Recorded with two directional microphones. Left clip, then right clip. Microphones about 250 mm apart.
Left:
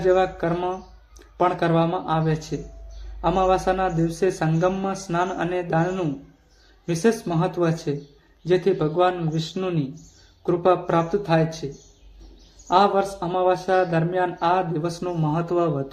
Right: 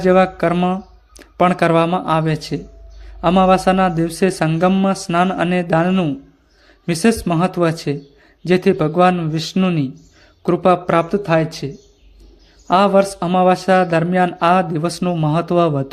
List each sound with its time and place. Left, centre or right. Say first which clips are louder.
0.0 s speech: right 6 dB; right
12.6 s speech: right 5 dB; right